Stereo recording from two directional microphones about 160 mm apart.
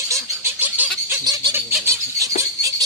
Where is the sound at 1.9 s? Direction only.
20° right (ahead or behind).